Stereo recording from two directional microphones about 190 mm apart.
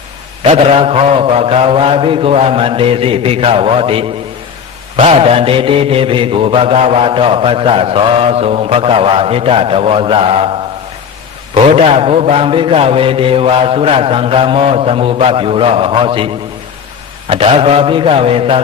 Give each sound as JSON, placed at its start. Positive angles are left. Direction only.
{"t": 0.4, "sound": "mantra", "side_deg": -30}
{"t": 11.5, "sound": "mantra", "side_deg": -30}